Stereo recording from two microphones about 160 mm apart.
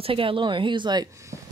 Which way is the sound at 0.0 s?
35° right (ahead or behind).